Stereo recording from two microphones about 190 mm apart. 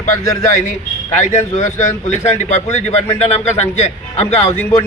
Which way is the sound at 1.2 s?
35° left (ahead or behind).